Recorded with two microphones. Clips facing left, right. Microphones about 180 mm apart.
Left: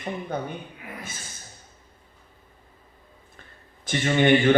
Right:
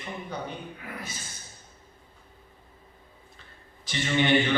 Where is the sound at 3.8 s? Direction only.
50° left (ahead or behind).